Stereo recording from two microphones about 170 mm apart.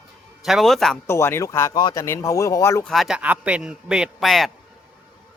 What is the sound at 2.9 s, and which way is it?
A man's voice, centre (ahead or behind).